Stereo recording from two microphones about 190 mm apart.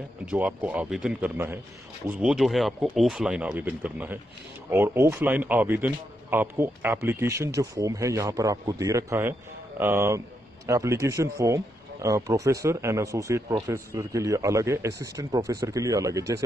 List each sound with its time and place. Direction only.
0.3 s speech: 5° right (ahead or behind)